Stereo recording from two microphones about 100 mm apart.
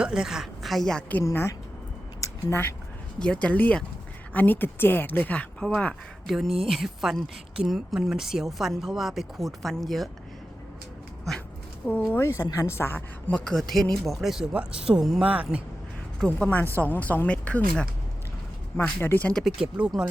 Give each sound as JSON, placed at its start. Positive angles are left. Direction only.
{"t": 0.0, "sound": "a woman's voice", "side_deg": -5}
{"t": 1.2, "sound": "a woman's voice", "side_deg": 30}
{"t": 2.2, "sound": "a sound", "side_deg": 25}
{"t": 3.2, "sound": "speech", "side_deg": 10}
{"t": 12.1, "sound": "a woman's voice", "side_deg": 25}
{"t": 13.4, "sound": "speech", "side_deg": 5}
{"t": 16.2, "sound": "a woman's voice", "side_deg": 15}
{"t": 19.3, "sound": "speech", "side_deg": 5}
{"t": 19.5, "sound": "speech", "side_deg": -10}